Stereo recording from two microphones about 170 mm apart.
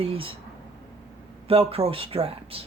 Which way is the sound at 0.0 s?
35° right (ahead or behind).